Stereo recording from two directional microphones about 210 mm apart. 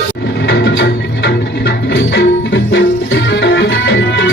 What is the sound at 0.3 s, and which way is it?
Music, 55° left (ahead or behind).